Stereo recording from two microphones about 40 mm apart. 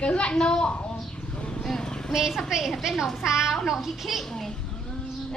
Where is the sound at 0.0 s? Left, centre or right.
Left.